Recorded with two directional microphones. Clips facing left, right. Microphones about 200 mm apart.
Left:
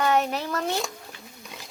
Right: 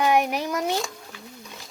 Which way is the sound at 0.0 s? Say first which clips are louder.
Right 2 dB; 15° right (ahead or behind).